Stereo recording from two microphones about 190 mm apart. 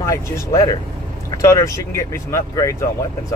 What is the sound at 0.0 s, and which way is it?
Speech, 15° left (ahead or behind).